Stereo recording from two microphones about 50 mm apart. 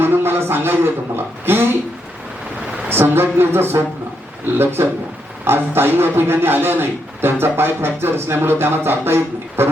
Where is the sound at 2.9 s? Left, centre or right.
Right.